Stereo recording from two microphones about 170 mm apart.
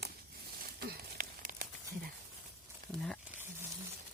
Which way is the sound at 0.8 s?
60° right (ahead or behind).